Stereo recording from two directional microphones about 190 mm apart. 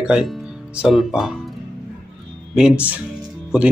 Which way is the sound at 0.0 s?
5° right (ahead or behind).